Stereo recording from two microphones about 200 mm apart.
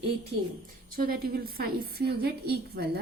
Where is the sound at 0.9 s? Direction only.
50° right (ahead or behind).